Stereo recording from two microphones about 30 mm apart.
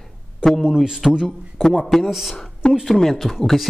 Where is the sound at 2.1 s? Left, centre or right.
Centre.